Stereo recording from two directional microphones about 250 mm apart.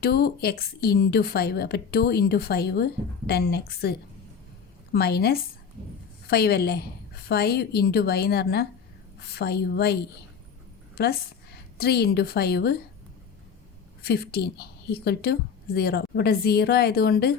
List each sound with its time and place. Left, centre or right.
0.0 s a woman's voice: left
14.0 s a woman's voice: left